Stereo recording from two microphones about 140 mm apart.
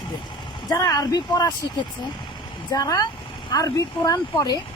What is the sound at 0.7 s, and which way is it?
Speech, 25° left (ahead or behind).